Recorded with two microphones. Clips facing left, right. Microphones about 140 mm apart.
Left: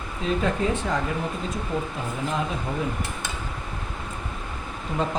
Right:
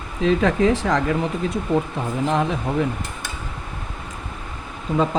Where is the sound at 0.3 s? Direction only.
90° right.